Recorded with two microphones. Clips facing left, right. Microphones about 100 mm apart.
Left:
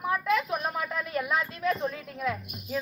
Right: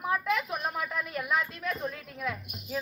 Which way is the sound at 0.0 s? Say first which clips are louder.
Left 2 dB; 5° right (ahead or behind).